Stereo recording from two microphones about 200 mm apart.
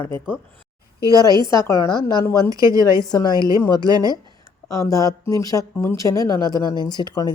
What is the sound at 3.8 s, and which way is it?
Speech, 20° right (ahead or behind).